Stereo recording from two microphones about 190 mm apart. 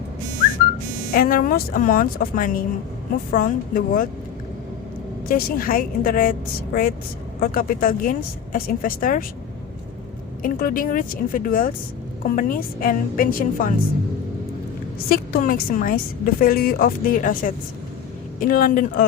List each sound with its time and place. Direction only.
1.1 s a woman's voice: 50° left (ahead or behind)
5.3 s a woman's voice: 50° left (ahead or behind)
7.3 s a woman's voice: 50° left (ahead or behind)
10.4 s a woman's voice: 50° left (ahead or behind)
14.9 s a woman's voice: 50° left (ahead or behind)